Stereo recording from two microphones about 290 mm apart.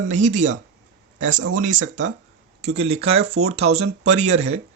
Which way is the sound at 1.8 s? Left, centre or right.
Right.